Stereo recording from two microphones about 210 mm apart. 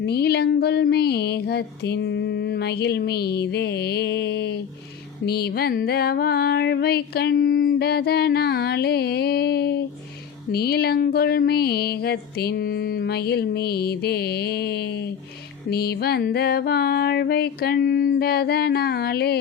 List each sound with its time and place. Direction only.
0.0 s music: 50° left (ahead or behind)